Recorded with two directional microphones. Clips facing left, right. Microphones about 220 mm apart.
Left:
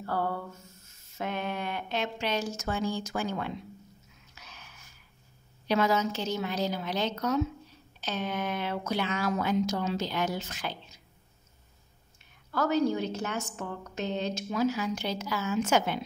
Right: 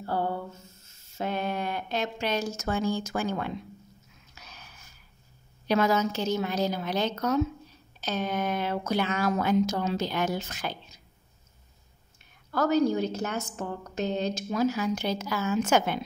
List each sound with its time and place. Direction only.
0.0 s a sound: 25° right (ahead or behind)
1.1 s a woman's voice: 35° right (ahead or behind); by 3.5 s 50° right (ahead or behind)
4.4 s gasp: 40° right (ahead or behind)
5.7 s a woman's voice: 45° right (ahead or behind)
12.4 s a woman's voice: 40° right (ahead or behind)